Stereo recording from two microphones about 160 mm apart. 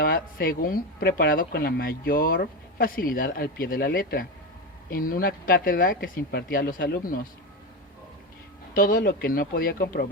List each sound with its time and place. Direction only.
0.0 s speech: 65° left (ahead or behind)
8.7 s speech: 65° left (ahead or behind)